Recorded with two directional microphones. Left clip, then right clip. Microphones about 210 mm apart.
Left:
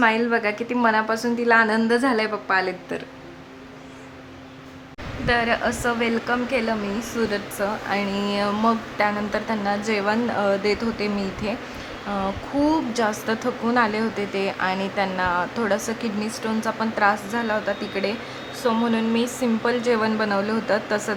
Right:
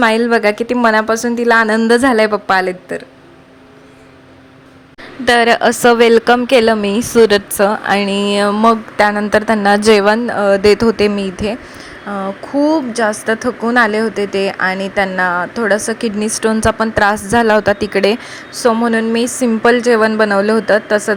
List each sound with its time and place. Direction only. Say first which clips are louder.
0.0 s a woman's voice: right 8 dB; 30° right (ahead or behind)
5.2 s a woman's voice: right 11 dB; 35° right (ahead or behind)